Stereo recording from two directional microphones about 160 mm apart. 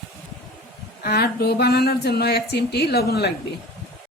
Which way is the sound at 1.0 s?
80° left.